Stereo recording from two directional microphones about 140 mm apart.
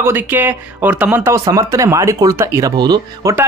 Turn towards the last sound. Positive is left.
turn(degrees=-25)  # may be behind; listen again after turning